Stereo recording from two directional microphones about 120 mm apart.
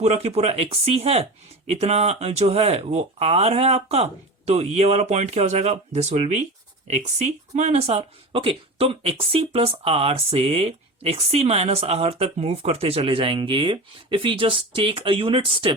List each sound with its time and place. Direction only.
0.0 s speech: 60° right (ahead or behind)